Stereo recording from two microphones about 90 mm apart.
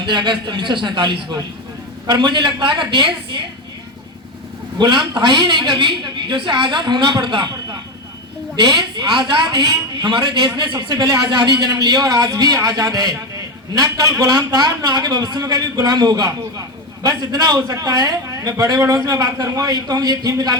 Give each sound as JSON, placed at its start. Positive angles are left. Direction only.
{"t": 0.0, "sound": "a woman's voice", "side_deg": -60}
{"t": 4.8, "sound": "a woman's voice", "side_deg": -60}